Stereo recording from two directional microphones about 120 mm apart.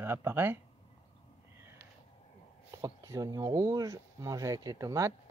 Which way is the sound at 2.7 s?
25° right (ahead or behind).